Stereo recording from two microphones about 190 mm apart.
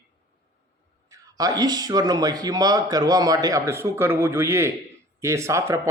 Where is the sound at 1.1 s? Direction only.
20° right (ahead or behind).